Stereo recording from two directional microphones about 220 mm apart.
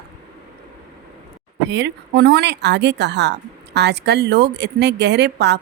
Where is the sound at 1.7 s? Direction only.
50° right (ahead or behind).